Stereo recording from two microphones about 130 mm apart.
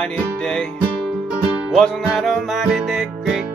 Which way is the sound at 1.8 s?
Centre (ahead or behind).